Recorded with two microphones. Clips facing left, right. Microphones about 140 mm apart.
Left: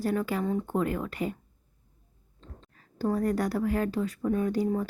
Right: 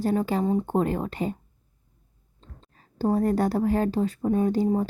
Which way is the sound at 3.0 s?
30° right (ahead or behind).